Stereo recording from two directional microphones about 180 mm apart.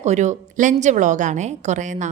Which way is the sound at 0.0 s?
40° right (ahead or behind).